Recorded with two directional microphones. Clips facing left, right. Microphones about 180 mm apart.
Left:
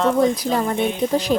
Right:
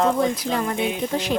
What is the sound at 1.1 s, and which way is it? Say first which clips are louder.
Speech: left 6 dB; 35° left (ahead or behind).